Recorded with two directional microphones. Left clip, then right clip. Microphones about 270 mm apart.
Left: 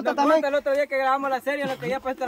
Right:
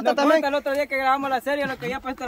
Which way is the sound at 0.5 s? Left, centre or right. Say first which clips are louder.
Left 1 dB; right.